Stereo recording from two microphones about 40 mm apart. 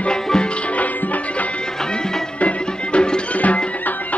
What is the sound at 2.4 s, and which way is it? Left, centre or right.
Music, left.